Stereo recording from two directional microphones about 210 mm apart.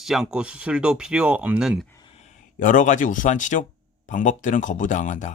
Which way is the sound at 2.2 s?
40° left (ahead or behind).